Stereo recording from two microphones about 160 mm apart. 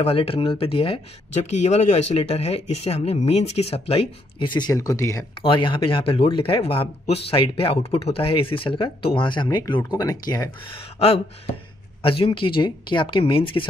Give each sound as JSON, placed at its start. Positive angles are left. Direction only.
{"t": 0.0, "sound": "speech", "side_deg": 35}
{"t": 5.4, "sound": "speech", "side_deg": 30}
{"t": 12.0, "sound": "speech", "side_deg": 35}